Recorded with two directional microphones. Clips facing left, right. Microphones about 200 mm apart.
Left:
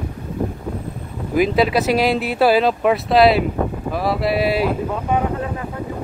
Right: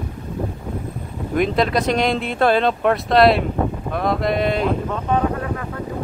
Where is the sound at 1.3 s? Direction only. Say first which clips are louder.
Left 2 dB; 5° left (ahead or behind).